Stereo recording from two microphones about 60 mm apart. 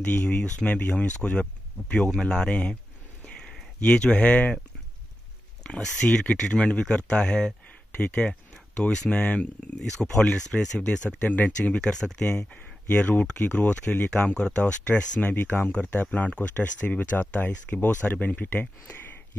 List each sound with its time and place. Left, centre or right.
0.0 s speech: left
3.8 s speech: centre
5.6 s speech: centre
15.2 s speech: left